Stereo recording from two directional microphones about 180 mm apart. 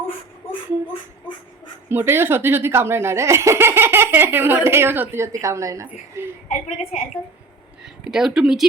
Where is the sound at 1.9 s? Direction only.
10° right (ahead or behind).